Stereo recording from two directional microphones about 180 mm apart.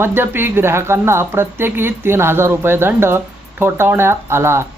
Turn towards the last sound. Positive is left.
turn(degrees=-15)  # may be behind; listen again after turning